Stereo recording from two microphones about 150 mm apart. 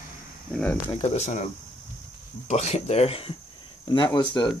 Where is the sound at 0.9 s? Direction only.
45° left (ahead or behind); by 4.5 s 30° left (ahead or behind).